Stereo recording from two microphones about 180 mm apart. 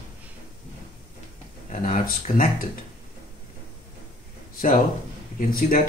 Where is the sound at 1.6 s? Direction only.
40° left (ahead or behind).